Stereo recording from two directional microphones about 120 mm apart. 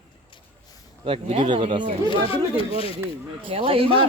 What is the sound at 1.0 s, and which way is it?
Speech, 50° right (ahead or behind).